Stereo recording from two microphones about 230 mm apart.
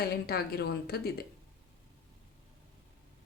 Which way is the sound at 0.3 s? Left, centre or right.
Left.